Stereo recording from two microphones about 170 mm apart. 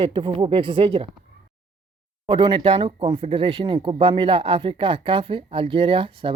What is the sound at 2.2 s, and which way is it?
Speech, 30° right (ahead or behind).